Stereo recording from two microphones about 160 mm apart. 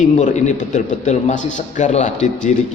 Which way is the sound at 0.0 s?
50° left (ahead or behind).